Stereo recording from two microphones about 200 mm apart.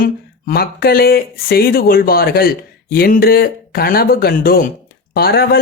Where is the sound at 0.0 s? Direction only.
45° left (ahead or behind).